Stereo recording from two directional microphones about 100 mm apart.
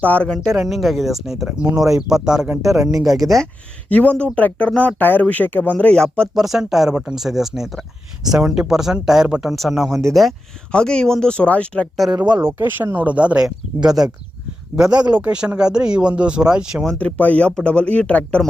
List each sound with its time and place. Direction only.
0.0 s speech: 15° left (ahead or behind)
0.7 s speech: centre (ahead or behind)
2.9 s speech: 35° right (ahead or behind)
3.8 s speech: 15° left (ahead or behind)
6.3 s speech: 5° right (ahead or behind)
9.9 s speech: 30° right (ahead or behind)
10.2 s speech: 5° left (ahead or behind)
12.1 s speech: 50° right (ahead or behind)
12.5 s speech: 20° right (ahead or behind)
13.7 s speech: 40° right (ahead or behind)
15.1 s speech: 10° right (ahead or behind)
16.8 s speech: 10° left (ahead or behind)